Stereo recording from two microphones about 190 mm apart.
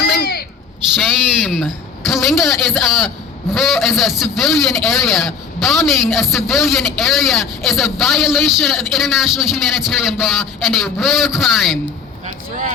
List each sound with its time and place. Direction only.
0.0 s a sound: 55° left (ahead or behind)
0.9 s a man's voice: centre (ahead or behind)
12.2 s vehicle: 40° right (ahead or behind)